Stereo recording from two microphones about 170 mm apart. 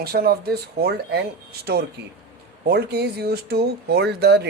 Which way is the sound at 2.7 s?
70° right (ahead or behind).